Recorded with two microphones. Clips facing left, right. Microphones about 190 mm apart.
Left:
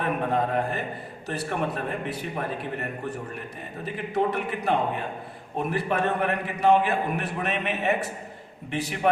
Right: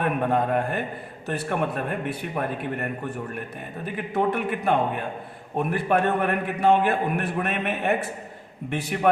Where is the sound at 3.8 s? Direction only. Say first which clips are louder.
Right 1 dB; 55° right (ahead or behind).